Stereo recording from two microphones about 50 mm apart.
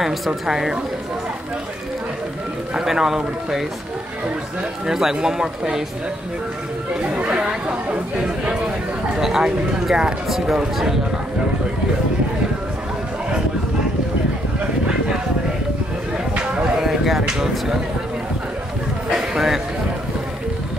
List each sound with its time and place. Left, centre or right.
0.0 s speech: centre
2.7 s speech: centre
4.8 s speech: centre
7.2 s chatter: right
9.2 s speech: centre
16.3 s a sound: right
16.7 s a sound: centre
19.0 s speech: centre